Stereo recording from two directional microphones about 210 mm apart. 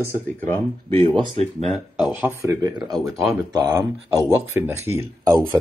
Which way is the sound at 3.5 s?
20° right (ahead or behind).